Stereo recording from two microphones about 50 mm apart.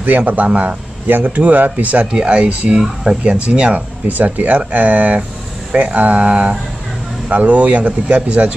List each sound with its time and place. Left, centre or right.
0.2 s speech: right
2.8 s speech: centre
4.1 s speech: right